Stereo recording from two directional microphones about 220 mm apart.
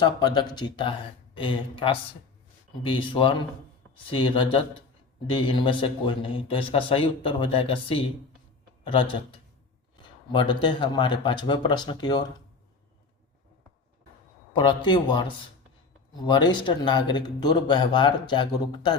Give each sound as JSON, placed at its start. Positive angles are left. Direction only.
{"t": 0.0, "sound": "a man's voice", "side_deg": 20}
{"t": 10.3, "sound": "a man's voice", "side_deg": 20}
{"t": 14.5, "sound": "a man's voice", "side_deg": 20}